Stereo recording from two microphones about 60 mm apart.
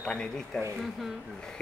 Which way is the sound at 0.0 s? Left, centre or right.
Centre.